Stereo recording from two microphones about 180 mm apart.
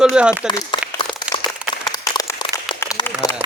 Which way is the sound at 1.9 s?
20° left (ahead or behind).